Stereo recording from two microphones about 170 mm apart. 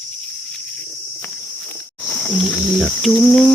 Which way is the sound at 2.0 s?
5° left (ahead or behind).